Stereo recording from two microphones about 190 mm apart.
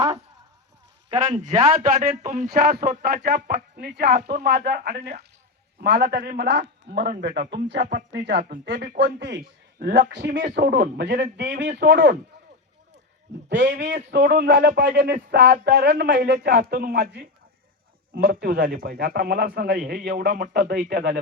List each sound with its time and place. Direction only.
1.5 s a man's voice: 45° right (ahead or behind)
9.9 s a man's voice: 70° right (ahead or behind)
13.5 s a man's voice: 75° right (ahead or behind)
14.1 s a man's voice: 60° right (ahead or behind)